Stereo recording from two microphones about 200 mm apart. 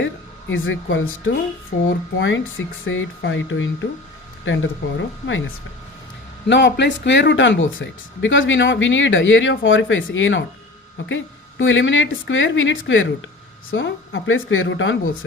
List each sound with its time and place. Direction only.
0.0 s speech: 70° left (ahead or behind)
1.7 s speech: 45° left (ahead or behind)
2.1 s speech: 70° left (ahead or behind)
6.5 s speech: 60° left (ahead or behind)